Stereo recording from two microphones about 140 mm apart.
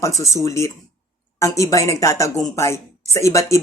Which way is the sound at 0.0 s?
20° left (ahead or behind).